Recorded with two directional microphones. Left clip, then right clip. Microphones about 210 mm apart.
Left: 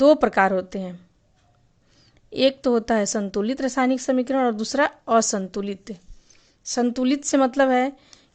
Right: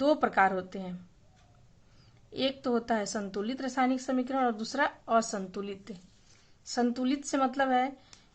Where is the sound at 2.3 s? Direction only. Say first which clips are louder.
Left 11 dB; 45° left (ahead or behind).